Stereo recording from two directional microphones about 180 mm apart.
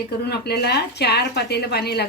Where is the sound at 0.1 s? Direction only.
65° left (ahead or behind).